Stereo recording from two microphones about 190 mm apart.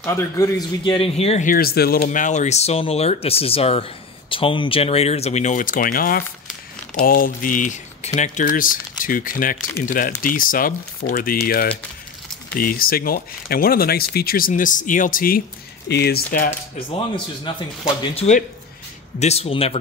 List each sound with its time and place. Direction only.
0.0 s a man's voice: 15° left (ahead or behind); by 1.5 s 35° left (ahead or behind)
1.5 s speech: 50° left (ahead or behind)
15.9 s speech: 60° left (ahead or behind)
18.1 s speech: 35° left (ahead or behind)